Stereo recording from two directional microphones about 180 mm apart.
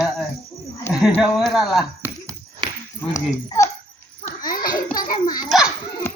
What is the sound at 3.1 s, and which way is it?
Speech, 15° left (ahead or behind).